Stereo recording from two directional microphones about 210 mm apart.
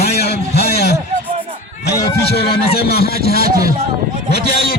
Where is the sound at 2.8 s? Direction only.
50° left (ahead or behind).